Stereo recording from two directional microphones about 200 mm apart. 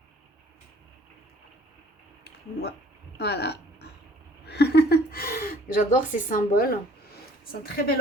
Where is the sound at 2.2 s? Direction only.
55° left (ahead or behind).